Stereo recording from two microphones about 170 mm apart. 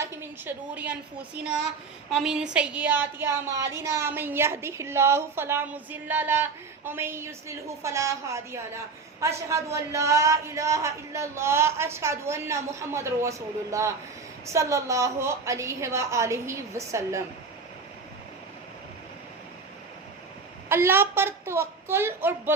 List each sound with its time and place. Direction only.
0.0 s a woman's voice: 15° right (ahead or behind)
2.0 s a woman's voice: 5° right (ahead or behind)
20.7 s a woman's voice: 15° right (ahead or behind)